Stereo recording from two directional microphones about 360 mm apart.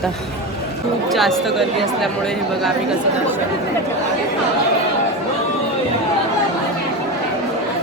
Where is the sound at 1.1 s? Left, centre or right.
Centre.